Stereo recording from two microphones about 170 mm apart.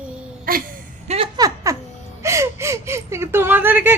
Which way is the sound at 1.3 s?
20° right (ahead or behind).